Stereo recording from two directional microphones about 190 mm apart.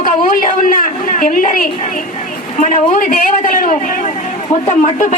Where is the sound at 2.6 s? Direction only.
40° left (ahead or behind).